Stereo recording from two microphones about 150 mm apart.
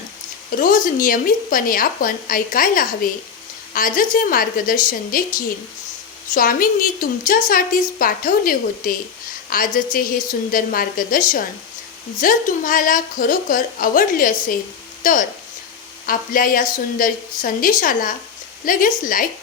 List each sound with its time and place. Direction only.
0.5 s a woman's voice: 65° left (ahead or behind)
6.3 s a woman's voice: 65° left (ahead or behind)